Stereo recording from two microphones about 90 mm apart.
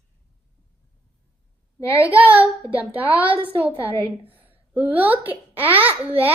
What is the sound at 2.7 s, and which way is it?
Speech, 15° right (ahead or behind).